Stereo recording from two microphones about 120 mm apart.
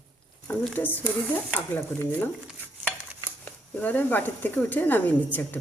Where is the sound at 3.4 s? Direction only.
15° left (ahead or behind).